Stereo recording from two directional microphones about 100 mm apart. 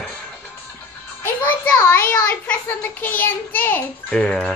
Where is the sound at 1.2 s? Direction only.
20° left (ahead or behind).